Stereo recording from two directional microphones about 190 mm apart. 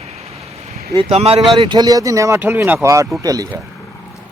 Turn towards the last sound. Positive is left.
turn(degrees=-20)  # may be behind; listen again after turning